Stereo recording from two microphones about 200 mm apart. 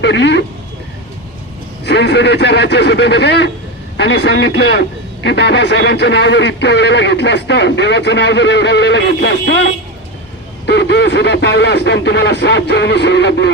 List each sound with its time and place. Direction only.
0.0 s a man's voice: 60° left (ahead or behind)
1.8 s a man's voice: 60° left (ahead or behind)